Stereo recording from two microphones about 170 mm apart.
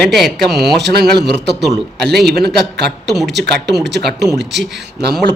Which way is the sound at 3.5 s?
Centre (ahead or behind).